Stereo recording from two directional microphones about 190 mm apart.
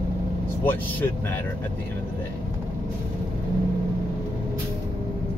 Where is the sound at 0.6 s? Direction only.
10° left (ahead or behind).